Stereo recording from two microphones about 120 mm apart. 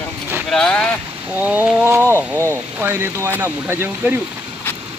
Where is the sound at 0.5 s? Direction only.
5° left (ahead or behind).